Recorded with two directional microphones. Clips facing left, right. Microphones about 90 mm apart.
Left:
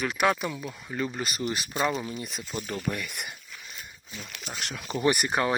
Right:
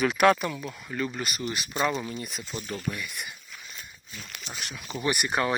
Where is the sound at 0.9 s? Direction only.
25° left (ahead or behind).